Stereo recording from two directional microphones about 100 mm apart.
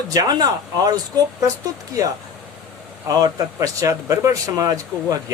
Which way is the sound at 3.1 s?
35° right (ahead or behind).